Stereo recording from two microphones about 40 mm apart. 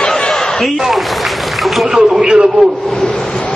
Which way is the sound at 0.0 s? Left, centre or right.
Centre.